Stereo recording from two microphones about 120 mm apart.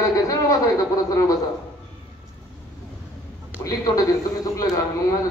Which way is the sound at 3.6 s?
25° left (ahead or behind).